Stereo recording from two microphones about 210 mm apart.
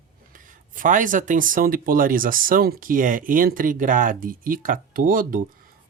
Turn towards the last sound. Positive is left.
turn(degrees=-40)  # may be behind; listen again after turning